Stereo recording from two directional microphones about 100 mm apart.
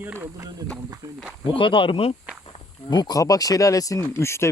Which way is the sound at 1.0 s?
35° right (ahead or behind).